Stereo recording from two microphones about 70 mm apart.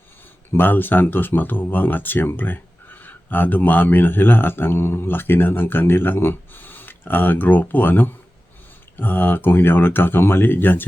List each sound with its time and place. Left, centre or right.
0.5 s speech: left